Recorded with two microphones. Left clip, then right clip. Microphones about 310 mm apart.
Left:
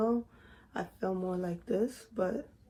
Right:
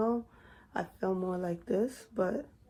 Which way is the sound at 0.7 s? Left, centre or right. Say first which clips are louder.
Right 2 dB; right.